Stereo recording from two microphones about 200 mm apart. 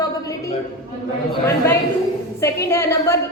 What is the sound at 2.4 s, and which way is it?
Speech, 15° left (ahead or behind).